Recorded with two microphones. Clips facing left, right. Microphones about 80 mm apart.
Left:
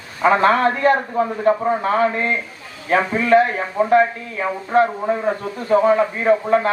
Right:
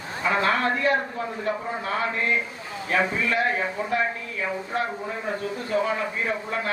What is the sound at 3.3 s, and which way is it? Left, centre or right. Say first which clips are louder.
A man's voice: left 14 dB; left.